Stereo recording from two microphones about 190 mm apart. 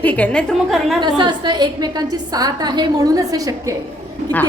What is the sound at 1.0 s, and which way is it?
A woman's voice, 25° right (ahead or behind).